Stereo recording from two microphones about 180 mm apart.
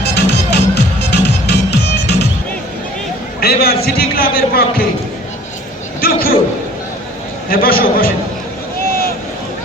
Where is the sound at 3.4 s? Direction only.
60° left (ahead or behind).